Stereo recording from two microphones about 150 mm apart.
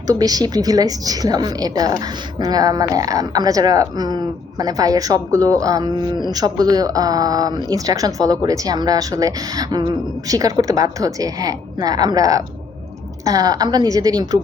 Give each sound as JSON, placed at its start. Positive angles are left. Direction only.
{"t": 0.1, "sound": "a woman's voice", "side_deg": -25}